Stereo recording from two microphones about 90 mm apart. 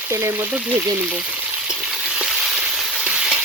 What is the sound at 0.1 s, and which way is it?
Speech, 25° right (ahead or behind).